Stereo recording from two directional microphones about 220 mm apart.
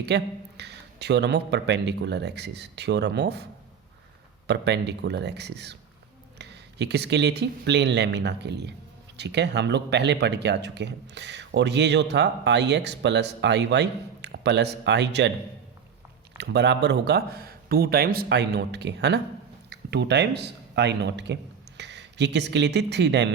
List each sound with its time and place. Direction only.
0.0 s speech: 50° right (ahead or behind)
4.4 s speech: 50° right (ahead or behind)
16.4 s a man's voice: 50° right (ahead or behind)